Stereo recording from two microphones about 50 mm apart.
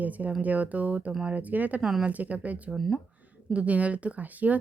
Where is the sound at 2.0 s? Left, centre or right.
Right.